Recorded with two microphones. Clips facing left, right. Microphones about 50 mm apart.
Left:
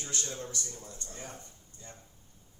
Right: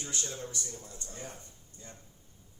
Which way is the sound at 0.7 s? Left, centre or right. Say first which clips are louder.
Even; centre.